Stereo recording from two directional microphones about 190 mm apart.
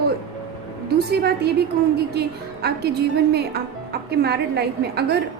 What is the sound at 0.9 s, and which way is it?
A woman's voice, 55° right (ahead or behind).